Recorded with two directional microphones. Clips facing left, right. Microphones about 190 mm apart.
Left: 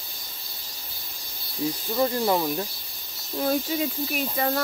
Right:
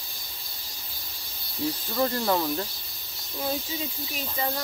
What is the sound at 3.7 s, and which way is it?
Speech, 65° left (ahead or behind).